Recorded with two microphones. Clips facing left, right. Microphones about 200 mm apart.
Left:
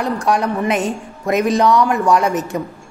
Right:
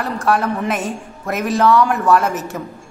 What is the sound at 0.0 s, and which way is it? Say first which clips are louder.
Speech: left 1 dB; 5° right (ahead or behind).